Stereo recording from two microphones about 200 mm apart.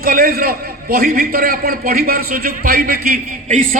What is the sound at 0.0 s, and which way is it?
A man's voice, 45° right (ahead or behind).